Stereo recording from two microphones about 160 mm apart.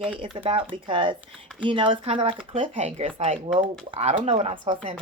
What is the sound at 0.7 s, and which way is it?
Speech, 30° right (ahead or behind).